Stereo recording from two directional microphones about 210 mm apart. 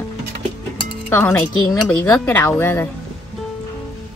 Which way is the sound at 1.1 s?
10° left (ahead or behind).